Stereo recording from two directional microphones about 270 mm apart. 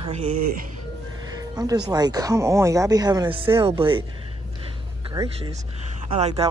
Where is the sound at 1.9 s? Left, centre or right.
Centre.